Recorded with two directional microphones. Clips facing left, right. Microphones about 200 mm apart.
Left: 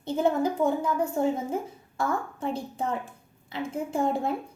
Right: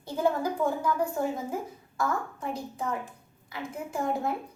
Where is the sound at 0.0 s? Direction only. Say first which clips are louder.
Left 3 dB; 25° left (ahead or behind).